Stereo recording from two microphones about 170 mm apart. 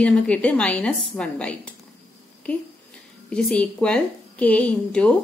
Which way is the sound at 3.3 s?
5° left (ahead or behind).